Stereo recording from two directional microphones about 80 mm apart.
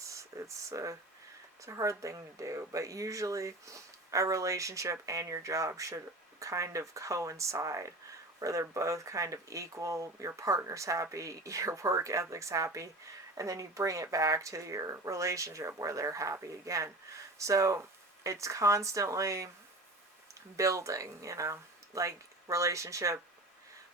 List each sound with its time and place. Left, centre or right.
0.0 s speech: right
20.6 s speech: right